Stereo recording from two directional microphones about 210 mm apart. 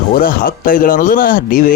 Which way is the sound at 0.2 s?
40° left (ahead or behind).